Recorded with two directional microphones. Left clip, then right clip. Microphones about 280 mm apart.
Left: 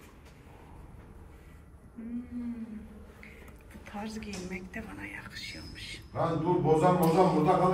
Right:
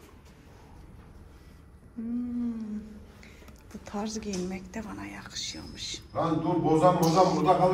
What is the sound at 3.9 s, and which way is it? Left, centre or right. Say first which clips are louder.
A woman's voice: right 5 dB; centre.